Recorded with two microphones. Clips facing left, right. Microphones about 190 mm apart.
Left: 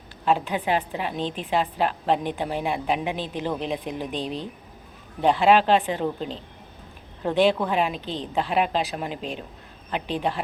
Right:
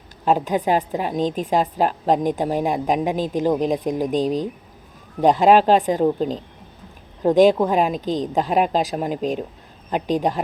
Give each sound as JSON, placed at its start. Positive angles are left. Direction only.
{"t": 0.3, "sound": "a woman's voice", "side_deg": -40}
{"t": 7.7, "sound": "a woman's voice", "side_deg": -40}